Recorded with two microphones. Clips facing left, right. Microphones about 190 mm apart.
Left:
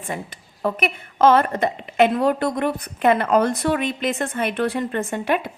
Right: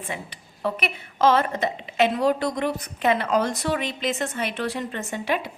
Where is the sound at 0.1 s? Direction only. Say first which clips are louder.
Left 8 dB; 45° left (ahead or behind).